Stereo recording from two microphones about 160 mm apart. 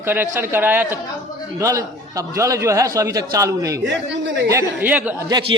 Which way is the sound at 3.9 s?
90° right.